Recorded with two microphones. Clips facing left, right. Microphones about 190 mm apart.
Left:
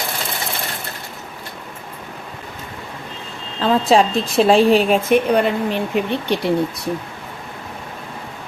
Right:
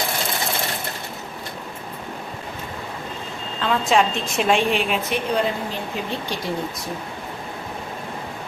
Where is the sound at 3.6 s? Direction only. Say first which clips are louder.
Left 5 dB; 35° left (ahead or behind); by 6.5 s 65° left (ahead or behind).